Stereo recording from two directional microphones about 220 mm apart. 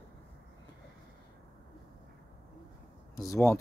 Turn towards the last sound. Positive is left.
turn(degrees=15)  # may be behind; listen again after turning